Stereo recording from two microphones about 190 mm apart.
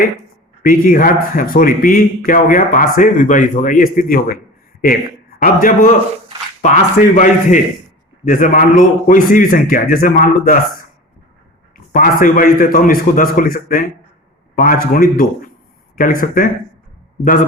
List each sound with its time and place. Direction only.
0.6 s a man's voice: 45° left (ahead or behind)
5.4 s a man's voice: 45° left (ahead or behind)
11.9 s a man's voice: 45° left (ahead or behind)